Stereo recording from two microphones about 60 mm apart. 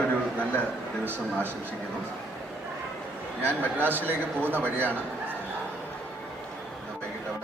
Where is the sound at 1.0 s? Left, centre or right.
Right.